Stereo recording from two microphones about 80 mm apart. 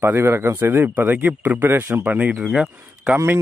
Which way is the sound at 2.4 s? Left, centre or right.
Centre.